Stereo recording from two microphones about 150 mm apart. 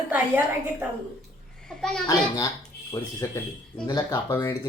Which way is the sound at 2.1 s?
20° left (ahead or behind).